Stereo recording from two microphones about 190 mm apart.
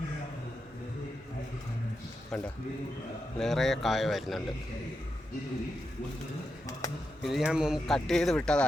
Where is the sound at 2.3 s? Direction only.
5° left (ahead or behind).